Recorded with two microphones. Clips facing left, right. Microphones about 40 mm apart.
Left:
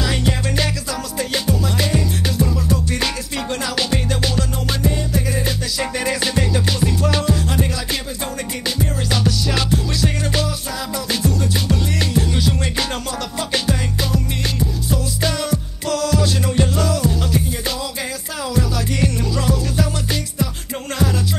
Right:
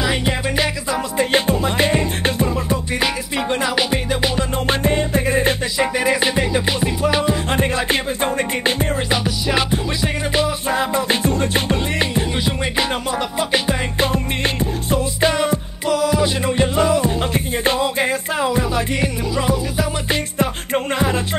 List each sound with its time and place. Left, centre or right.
0.0 s music: centre
1.1 s music: right
4.6 s music: right
5.8 s music: right
7.4 s music: right
9.1 s music: right
10.7 s music: right
20.3 s music: right